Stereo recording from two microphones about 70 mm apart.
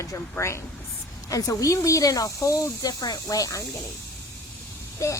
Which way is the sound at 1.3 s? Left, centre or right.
Left.